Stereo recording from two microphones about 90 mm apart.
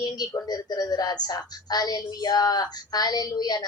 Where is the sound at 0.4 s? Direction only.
45° left (ahead or behind).